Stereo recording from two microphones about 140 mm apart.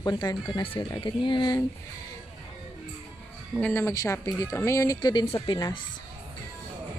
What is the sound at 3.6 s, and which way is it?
Speech, 15° left (ahead or behind).